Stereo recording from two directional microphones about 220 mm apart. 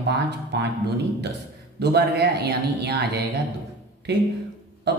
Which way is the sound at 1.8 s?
50° right (ahead or behind).